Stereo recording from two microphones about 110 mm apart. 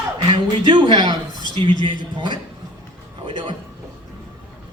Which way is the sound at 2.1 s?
45° right (ahead or behind).